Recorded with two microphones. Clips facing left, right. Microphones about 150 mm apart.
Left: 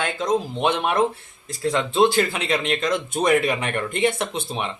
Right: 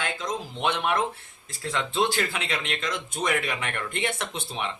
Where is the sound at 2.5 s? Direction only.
40° left (ahead or behind).